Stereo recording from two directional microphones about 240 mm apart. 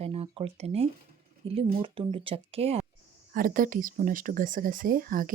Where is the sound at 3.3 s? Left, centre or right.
Right.